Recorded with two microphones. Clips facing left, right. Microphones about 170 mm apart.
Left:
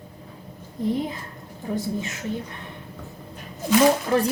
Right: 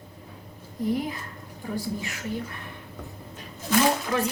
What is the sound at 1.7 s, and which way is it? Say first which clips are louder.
Speech: left 4 dB; 20° left (ahead or behind).